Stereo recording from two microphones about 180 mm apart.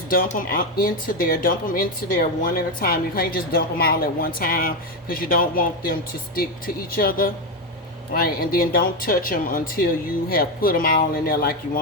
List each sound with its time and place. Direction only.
0.1 s speech: 50° left (ahead or behind)